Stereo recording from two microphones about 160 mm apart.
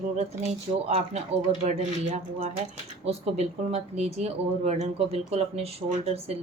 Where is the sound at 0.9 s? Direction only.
45° right (ahead or behind).